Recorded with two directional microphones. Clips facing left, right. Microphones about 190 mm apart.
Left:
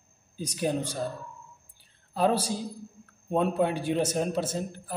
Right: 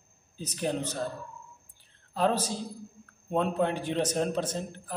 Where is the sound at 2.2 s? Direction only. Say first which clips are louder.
Left 2 dB; 10° left (ahead or behind).